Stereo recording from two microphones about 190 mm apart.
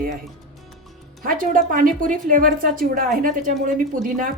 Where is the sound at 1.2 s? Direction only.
45° right (ahead or behind).